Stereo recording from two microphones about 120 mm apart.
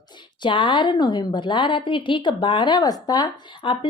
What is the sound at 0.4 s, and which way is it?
A woman's voice, 40° left (ahead or behind).